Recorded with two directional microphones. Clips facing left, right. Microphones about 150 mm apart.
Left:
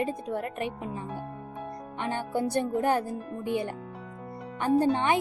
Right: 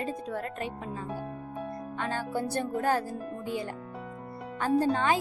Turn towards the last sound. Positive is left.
turn(degrees=20)  # may be behind; listen again after turning